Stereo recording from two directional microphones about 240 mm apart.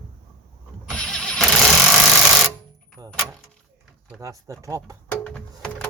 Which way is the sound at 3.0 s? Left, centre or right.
Centre.